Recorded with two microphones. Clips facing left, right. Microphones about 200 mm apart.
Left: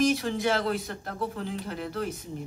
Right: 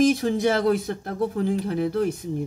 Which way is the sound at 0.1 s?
50° right (ahead or behind).